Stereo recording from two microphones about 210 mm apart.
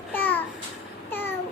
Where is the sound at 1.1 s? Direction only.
10° left (ahead or behind).